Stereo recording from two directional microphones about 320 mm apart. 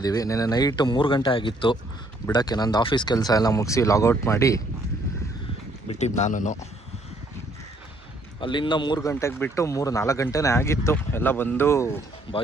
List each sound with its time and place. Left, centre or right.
0.0 s speech: centre
5.9 s speech: left
8.4 s speech: centre